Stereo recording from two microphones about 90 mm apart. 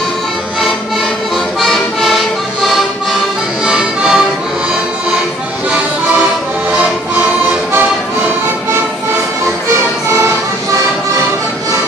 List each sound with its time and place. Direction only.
1.6 s music: centre (ahead or behind)
5.7 s music: 15° right (ahead or behind)